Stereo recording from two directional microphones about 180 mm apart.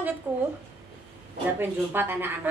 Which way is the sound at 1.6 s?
10° right (ahead or behind).